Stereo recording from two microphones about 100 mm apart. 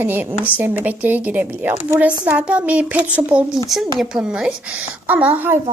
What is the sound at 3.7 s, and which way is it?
A woman's voice, centre (ahead or behind).